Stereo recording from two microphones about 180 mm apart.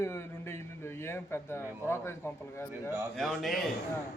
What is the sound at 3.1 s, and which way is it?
Speech, centre (ahead or behind).